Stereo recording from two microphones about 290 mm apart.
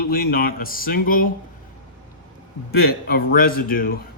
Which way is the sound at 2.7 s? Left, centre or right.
Left.